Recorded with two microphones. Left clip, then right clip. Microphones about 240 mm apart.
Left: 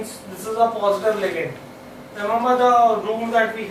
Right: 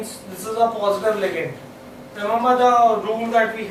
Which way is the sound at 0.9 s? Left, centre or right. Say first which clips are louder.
Even; centre.